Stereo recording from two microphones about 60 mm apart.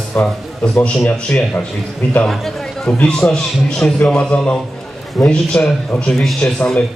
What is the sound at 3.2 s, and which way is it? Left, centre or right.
Speech, left.